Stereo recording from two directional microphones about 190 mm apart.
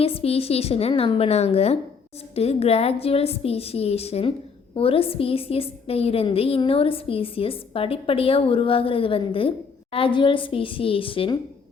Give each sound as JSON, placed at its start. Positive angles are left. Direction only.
{"t": 0.0, "sound": "a woman's voice", "side_deg": 30}